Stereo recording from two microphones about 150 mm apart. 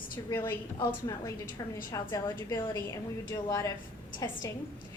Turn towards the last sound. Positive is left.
turn(degrees=20)  # may be behind; listen again after turning